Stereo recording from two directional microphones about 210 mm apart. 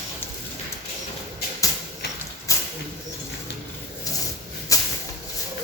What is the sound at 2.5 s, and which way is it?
Bird, 15° left (ahead or behind).